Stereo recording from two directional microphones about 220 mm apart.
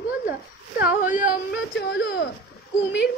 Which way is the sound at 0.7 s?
40° left (ahead or behind).